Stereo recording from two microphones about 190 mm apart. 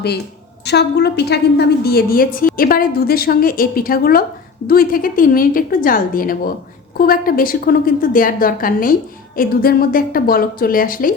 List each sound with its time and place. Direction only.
0.6 s a woman's voice: 60° left (ahead or behind)